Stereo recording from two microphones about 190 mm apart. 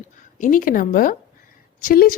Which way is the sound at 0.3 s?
45° left (ahead or behind).